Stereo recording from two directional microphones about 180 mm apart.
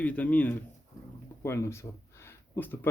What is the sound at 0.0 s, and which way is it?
Speech, 10° left (ahead or behind).